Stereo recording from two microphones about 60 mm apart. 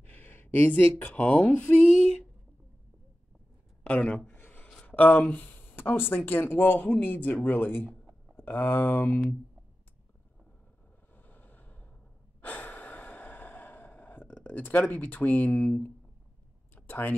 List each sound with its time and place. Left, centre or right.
0.1 s speech: left
3.8 s speech: left
4.3 s a sound: left
4.7 s speech: left
11.1 s vehicle: left
12.4 s breathing: left
16.7 s a sound: left